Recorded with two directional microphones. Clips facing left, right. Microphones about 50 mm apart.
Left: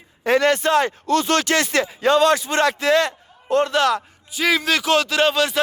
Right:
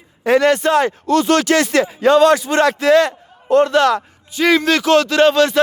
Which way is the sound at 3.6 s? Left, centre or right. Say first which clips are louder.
Right 4 dB; centre.